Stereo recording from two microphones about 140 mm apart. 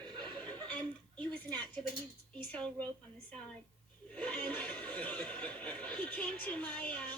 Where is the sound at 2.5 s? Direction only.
10° left (ahead or behind).